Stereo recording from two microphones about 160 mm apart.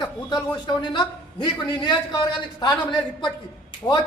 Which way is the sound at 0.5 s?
25° left (ahead or behind).